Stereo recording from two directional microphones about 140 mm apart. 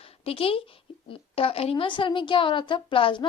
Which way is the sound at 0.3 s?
40° left (ahead or behind).